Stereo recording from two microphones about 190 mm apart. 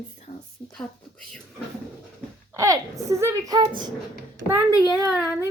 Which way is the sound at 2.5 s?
15° right (ahead or behind).